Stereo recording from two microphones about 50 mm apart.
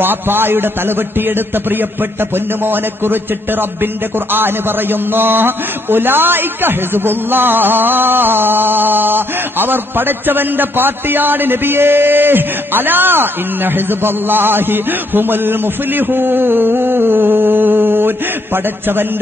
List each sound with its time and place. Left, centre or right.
0.0 s a man's voice: right